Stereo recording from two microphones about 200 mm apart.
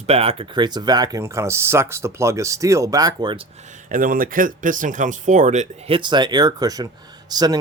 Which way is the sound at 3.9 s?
45° right (ahead or behind).